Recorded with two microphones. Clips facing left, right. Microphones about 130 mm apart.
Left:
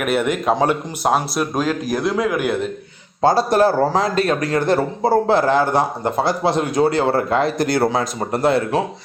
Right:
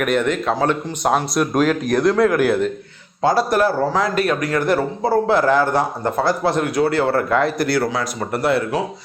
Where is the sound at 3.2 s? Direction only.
30° left (ahead or behind).